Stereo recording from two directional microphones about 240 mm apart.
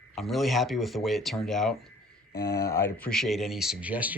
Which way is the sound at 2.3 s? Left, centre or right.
Left.